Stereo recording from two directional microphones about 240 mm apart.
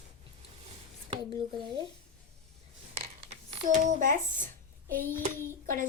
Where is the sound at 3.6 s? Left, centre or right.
Right.